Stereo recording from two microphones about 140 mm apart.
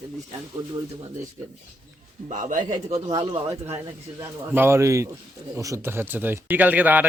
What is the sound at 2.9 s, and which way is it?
Speech, 25° right (ahead or behind).